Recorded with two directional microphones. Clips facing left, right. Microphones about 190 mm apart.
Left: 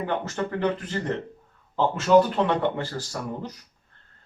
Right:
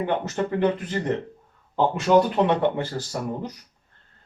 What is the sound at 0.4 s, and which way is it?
Speech, 25° right (ahead or behind).